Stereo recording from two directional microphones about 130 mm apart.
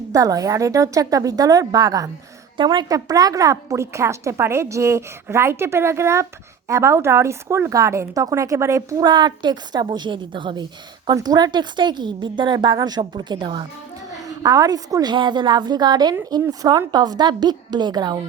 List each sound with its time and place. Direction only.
0.1 s a woman's voice: 25° right (ahead or behind)